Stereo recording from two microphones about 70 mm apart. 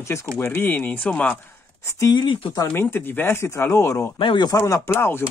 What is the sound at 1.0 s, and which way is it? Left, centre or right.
Speech, centre.